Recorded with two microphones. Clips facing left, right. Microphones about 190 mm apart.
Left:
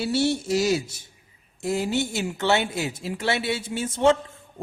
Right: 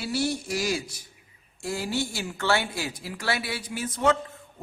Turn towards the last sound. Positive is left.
turn(degrees=25)  # may be behind; listen again after turning